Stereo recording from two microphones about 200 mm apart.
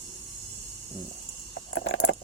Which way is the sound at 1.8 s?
70° left (ahead or behind).